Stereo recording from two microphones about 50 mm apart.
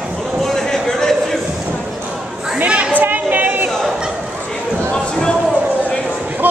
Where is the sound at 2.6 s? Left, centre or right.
Right.